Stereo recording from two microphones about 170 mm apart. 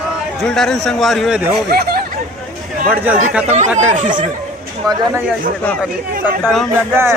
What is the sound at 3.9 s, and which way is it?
Speech, 50° right (ahead or behind).